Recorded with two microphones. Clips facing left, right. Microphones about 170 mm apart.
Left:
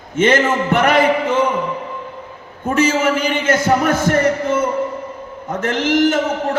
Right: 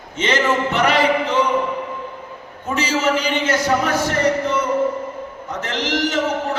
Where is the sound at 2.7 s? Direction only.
50° left (ahead or behind).